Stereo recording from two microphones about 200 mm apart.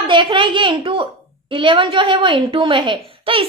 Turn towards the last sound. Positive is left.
turn(degrees=-25)  # may be behind; listen again after turning